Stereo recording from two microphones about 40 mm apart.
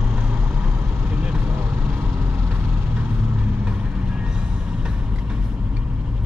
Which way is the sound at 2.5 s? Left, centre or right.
Right.